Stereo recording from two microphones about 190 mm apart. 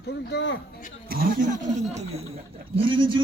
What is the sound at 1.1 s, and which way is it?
Speech, 50° right (ahead or behind).